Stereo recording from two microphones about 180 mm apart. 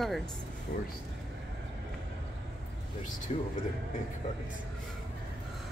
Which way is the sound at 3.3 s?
35° left (ahead or behind).